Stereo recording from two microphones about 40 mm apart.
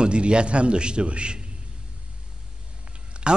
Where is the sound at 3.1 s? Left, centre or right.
Right.